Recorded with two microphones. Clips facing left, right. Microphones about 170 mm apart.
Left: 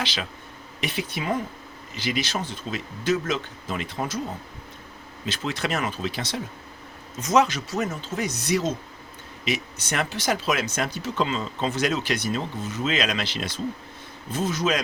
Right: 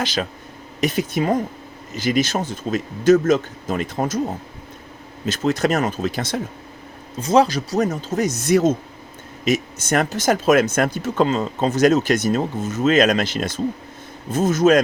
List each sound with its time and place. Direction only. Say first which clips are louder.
0.0 s speech: right 7 dB; 45° right (ahead or behind)
5.2 s speech: right 9 dB; 45° right (ahead or behind)
7.2 s speech: right 5 dB; 30° right (ahead or behind); by 14.8 s 45° right (ahead or behind)